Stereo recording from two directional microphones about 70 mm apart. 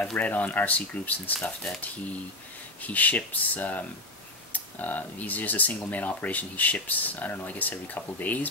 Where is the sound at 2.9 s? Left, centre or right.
Left.